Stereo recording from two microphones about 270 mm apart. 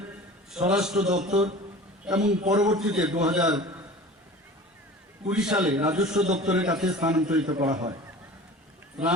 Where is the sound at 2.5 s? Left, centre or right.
Centre.